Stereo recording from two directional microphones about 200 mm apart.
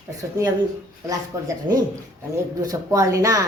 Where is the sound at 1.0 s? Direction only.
15° right (ahead or behind).